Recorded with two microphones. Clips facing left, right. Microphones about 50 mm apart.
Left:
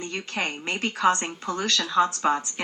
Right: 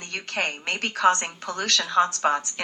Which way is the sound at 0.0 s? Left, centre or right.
Right.